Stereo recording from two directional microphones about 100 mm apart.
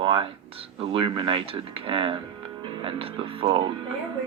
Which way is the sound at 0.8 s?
60° right (ahead or behind).